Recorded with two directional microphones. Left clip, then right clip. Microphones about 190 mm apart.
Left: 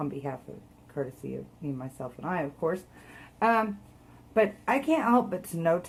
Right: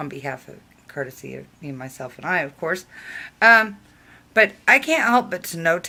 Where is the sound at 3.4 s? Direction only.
5° right (ahead or behind).